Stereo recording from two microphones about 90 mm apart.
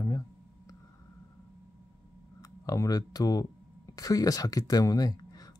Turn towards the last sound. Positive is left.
turn(degrees=45)  # may be behind; listen again after turning